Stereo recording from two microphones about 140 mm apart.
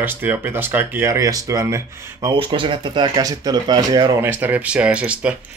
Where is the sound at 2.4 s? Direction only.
35° right (ahead or behind).